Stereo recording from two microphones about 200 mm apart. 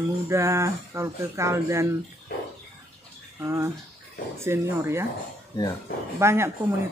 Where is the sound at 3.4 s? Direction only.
15° right (ahead or behind).